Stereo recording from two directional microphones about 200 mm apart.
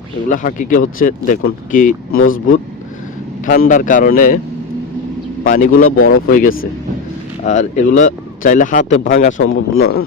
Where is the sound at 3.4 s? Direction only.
40° left (ahead or behind).